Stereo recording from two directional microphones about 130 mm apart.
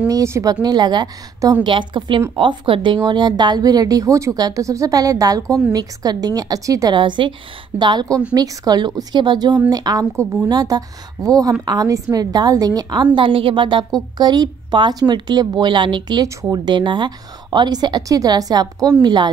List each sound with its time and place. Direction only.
0.1 s a woman's voice: 25° right (ahead or behind)